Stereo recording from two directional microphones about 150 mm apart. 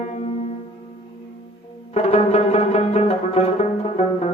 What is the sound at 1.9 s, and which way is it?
Music, 45° left (ahead or behind).